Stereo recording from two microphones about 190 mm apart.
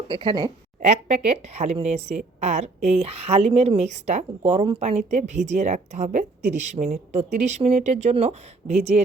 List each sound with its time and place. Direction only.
0.1 s a woman's voice: 25° right (ahead or behind)
0.8 s a woman's voice: 35° right (ahead or behind)